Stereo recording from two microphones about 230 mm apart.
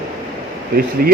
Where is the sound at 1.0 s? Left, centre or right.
Right.